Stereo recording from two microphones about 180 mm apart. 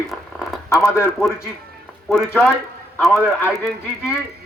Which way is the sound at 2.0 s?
Centre (ahead or behind).